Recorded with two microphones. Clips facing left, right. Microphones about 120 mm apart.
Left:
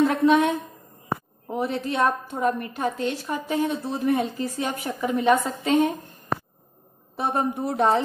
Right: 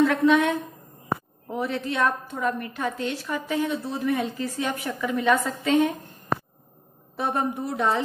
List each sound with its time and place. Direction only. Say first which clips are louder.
0.0 s a woman's voice: left 1 dB; 35° left (ahead or behind)
7.2 s a woman's voice: left 1 dB; 35° left (ahead or behind)